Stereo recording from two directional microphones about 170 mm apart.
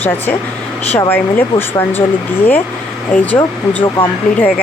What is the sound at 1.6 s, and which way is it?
Speech, 10° left (ahead or behind).